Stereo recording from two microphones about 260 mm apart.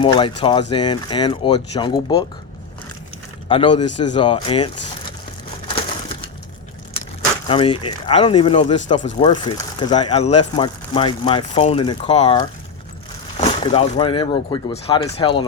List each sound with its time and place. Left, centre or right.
0.0 s speech: centre
3.5 s speech: centre
3.8 s speech: left
4.1 s speech: centre
7.4 s speech: centre